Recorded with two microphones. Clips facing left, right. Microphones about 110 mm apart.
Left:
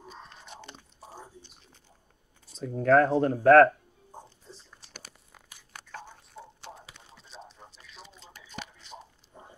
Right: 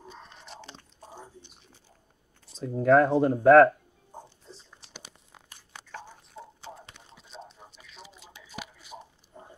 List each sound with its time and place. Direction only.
0.5 s chewing: centre (ahead or behind)
1.4 s biting: 15° right (ahead or behind)
2.5 s speech: 5° right (ahead or behind)
5.7 s biting: 10° right (ahead or behind)
6.9 s a sound: centre (ahead or behind)